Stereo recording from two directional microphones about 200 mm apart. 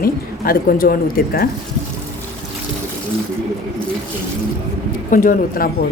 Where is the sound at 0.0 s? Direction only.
45° left (ahead or behind).